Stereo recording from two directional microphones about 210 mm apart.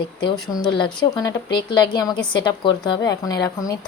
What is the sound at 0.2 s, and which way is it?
Speech, 20° left (ahead or behind).